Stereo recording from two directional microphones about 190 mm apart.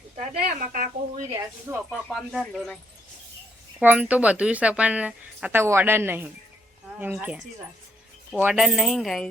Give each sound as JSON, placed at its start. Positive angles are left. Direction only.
{"t": 0.2, "sound": "speech", "side_deg": -45}
{"t": 1.3, "sound": "speech", "side_deg": -15}
{"t": 1.9, "sound": "pulleys", "side_deg": 0}
{"t": 3.8, "sound": "speech", "side_deg": -5}
{"t": 8.4, "sound": "pulleys", "side_deg": -5}